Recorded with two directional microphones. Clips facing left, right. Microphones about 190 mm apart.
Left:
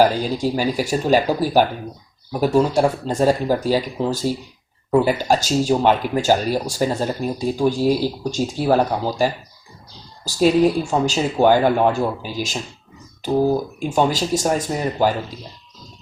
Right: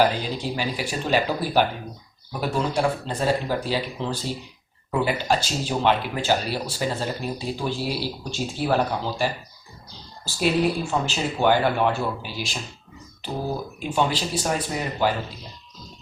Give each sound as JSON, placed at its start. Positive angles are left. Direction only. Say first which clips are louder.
{"t": 0.2, "sound": "speech", "louder": "left 7 dB", "side_deg": 45}
{"t": 13.7, "sound": "speech", "louder": "left 5 dB", "side_deg": 45}